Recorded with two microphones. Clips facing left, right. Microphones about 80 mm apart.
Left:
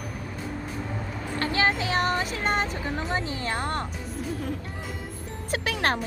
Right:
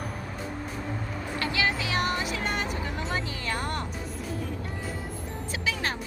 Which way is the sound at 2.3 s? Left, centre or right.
Left.